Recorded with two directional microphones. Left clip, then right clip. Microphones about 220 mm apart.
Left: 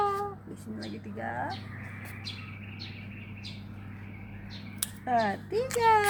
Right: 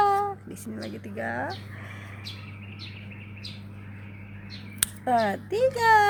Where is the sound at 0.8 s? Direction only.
45° right (ahead or behind).